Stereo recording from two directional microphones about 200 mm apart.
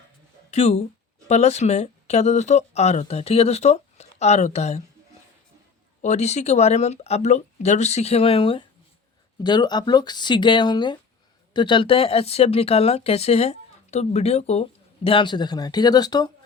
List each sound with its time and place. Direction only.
0.5 s speech: 35° left (ahead or behind)
6.0 s speech: 35° left (ahead or behind)